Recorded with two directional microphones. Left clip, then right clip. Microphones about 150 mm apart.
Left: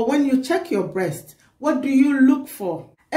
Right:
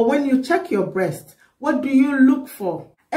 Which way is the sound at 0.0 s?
10° left (ahead or behind).